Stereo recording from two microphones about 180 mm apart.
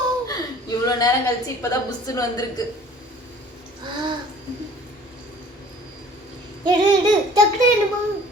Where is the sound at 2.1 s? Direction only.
20° left (ahead or behind).